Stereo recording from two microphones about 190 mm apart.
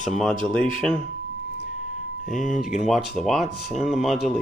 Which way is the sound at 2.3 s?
Centre (ahead or behind).